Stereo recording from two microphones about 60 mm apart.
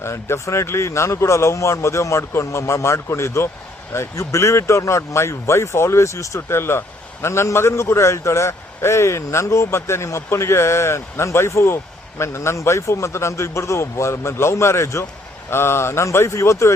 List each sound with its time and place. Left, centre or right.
0.0 s a man's voice: left